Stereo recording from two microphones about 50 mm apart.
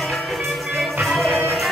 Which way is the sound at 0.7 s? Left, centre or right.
Centre.